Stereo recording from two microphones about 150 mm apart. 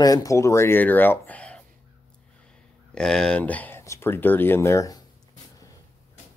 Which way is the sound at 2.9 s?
5° left (ahead or behind).